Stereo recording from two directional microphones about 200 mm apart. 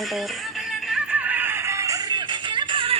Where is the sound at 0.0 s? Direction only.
Centre (ahead or behind).